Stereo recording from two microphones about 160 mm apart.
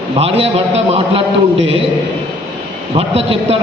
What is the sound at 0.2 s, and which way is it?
A man's voice, 40° right (ahead or behind).